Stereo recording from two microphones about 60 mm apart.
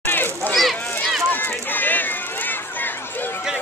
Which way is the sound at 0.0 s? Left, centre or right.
Left.